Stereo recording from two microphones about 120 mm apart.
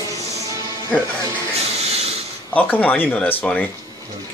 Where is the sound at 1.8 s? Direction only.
60° right (ahead or behind).